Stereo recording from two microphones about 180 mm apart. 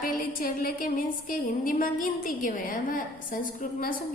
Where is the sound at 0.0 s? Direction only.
50° left (ahead or behind).